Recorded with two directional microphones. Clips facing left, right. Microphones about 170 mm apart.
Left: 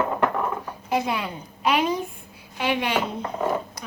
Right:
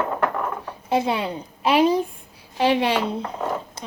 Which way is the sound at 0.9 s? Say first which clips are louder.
Right 3 dB; 30° right (ahead or behind).